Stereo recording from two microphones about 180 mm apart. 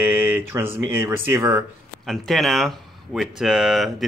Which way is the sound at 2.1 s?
Centre (ahead or behind).